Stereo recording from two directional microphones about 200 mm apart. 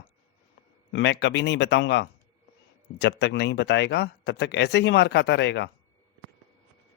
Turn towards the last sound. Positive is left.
turn(degrees=60)  # may be behind; listen again after turning